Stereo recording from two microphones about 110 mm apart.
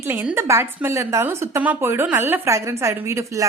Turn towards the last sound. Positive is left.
turn(degrees=-25)  # may be behind; listen again after turning